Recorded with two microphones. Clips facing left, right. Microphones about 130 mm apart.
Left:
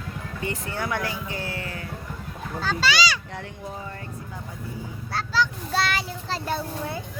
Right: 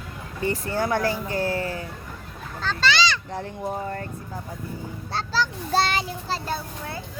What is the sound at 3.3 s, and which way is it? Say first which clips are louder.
Speech: right 6 dB; 35° right (ahead or behind).